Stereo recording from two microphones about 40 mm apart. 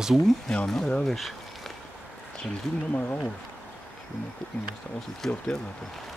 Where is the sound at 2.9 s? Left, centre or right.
Left.